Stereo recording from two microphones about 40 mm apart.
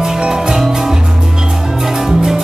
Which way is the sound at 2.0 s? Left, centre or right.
Centre.